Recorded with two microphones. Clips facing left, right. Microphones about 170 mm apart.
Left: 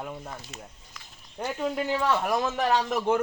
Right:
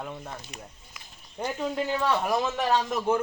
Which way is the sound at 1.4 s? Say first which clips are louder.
Even; 5° right (ahead or behind).